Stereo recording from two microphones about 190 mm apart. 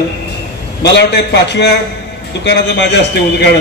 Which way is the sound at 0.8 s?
65° left (ahead or behind).